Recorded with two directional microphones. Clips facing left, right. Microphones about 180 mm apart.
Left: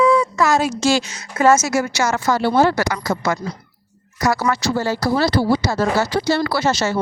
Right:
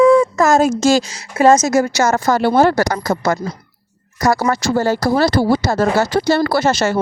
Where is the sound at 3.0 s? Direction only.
40° right (ahead or behind).